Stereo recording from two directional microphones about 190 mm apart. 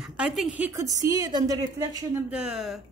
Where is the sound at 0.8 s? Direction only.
20° right (ahead or behind).